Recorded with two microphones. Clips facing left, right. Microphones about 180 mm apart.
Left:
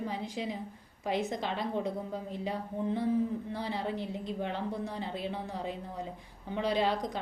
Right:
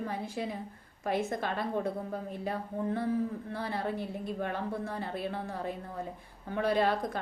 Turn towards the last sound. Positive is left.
turn(degrees=15)  # may be behind; listen again after turning